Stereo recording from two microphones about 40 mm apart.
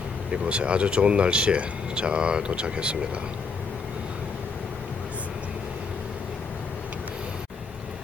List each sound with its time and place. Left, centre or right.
0.3 s speech: right